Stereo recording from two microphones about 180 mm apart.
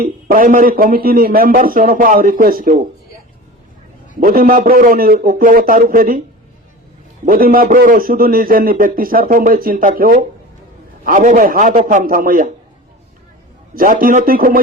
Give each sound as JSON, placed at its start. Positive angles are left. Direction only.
{"t": 0.0, "sound": "a man's voice", "side_deg": -50}
{"t": 4.2, "sound": "a man's voice", "side_deg": -50}
{"t": 7.3, "sound": "a man's voice", "side_deg": -55}
{"t": 13.7, "sound": "a man's voice", "side_deg": -50}